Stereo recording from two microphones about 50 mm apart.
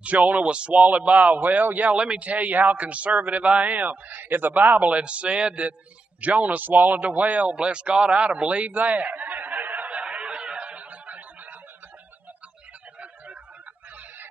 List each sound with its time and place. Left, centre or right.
0.0 s a man's voice: right
2.0 s a man's voice: right
4.7 s a man's voice: right